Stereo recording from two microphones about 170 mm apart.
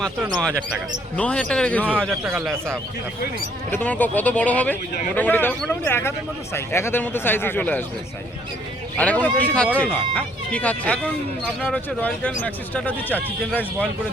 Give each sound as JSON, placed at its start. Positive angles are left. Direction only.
{"t": 1.1, "sound": "a man's voice", "side_deg": 5}
{"t": 3.7, "sound": "speech", "side_deg": 10}
{"t": 9.0, "sound": "speech", "side_deg": 10}